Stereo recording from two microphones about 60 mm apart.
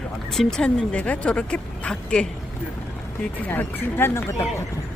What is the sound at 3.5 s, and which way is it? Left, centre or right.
Speech, left.